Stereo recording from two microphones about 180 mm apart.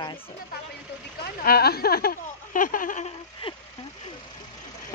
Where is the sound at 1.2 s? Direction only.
55° left (ahead or behind).